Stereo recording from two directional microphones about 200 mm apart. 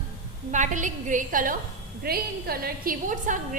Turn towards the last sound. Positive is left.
turn(degrees=-45)  # may be behind; listen again after turning